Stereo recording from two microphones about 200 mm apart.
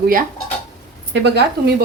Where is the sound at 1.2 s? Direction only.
55° right (ahead or behind).